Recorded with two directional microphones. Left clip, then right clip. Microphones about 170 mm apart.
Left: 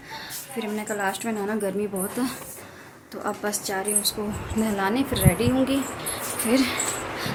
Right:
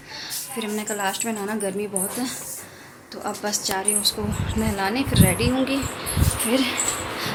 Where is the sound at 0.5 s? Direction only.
5° left (ahead or behind).